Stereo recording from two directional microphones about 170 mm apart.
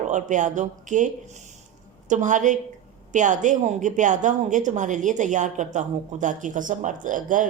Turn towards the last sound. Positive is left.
turn(degrees=-50)  # may be behind; listen again after turning